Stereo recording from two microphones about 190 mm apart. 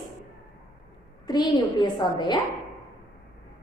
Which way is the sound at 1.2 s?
20° left (ahead or behind).